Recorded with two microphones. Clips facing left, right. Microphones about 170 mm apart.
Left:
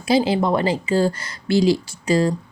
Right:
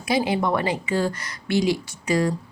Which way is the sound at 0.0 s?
30° left (ahead or behind).